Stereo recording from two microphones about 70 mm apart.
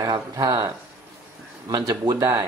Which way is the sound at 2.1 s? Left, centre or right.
Right.